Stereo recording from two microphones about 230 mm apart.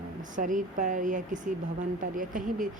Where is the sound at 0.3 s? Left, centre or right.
Right.